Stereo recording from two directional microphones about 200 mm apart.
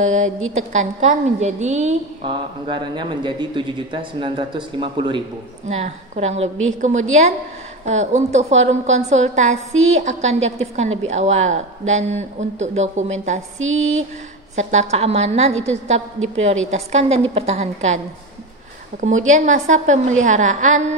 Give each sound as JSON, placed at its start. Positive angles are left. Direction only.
{"t": 0.0, "sound": "a woman's voice", "side_deg": -35}
{"t": 14.5, "sound": "a woman's voice", "side_deg": -35}